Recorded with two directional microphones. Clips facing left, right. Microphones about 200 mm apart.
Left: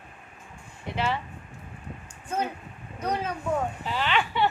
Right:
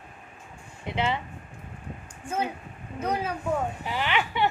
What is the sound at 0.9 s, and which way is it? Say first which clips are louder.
Speech: right 1 dB; 20° right (ahead or behind).